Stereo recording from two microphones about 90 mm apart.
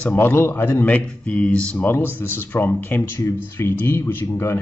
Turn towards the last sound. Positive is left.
turn(degrees=25)  # may be behind; listen again after turning